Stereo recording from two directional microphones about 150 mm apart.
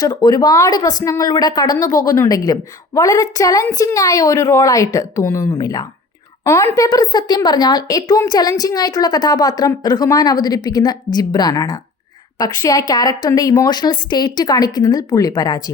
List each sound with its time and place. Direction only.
0.0 s a woman's voice: 25° left (ahead or behind)